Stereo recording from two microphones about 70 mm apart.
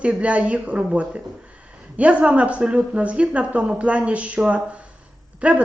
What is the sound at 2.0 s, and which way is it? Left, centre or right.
A woman's voice, centre.